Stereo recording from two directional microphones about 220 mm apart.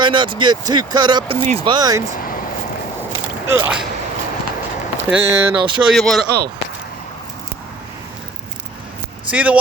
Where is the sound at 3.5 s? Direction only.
10° right (ahead or behind).